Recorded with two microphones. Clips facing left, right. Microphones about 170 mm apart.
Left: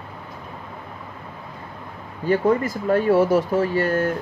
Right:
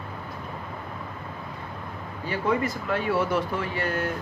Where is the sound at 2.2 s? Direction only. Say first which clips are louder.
Left 7 dB; 45° left (ahead or behind).